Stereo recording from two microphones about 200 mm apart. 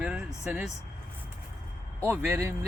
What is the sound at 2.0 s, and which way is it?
Speech, 10° right (ahead or behind).